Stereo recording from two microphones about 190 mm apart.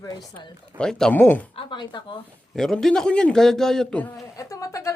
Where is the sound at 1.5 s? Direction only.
25° left (ahead or behind).